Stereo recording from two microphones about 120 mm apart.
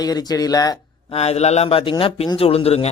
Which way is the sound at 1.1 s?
60° left (ahead or behind).